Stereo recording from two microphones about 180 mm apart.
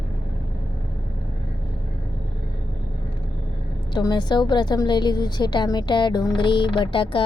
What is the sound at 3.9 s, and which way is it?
A woman's voice, 25° left (ahead or behind).